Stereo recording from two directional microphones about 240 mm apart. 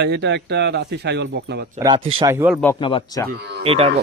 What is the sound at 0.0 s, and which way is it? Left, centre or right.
Speech, right.